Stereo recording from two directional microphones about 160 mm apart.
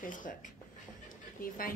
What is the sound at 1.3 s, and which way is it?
Speech, 65° left (ahead or behind).